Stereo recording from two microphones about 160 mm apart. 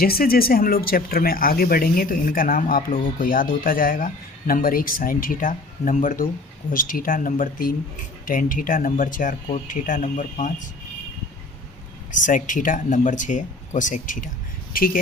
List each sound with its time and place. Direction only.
0.0 s speech: 70° left (ahead or behind); by 10.5 s 50° left (ahead or behind)
12.1 s speech: 55° left (ahead or behind)